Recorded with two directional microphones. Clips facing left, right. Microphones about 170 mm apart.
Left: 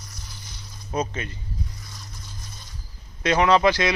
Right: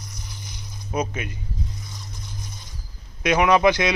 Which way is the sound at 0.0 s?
20° right (ahead or behind).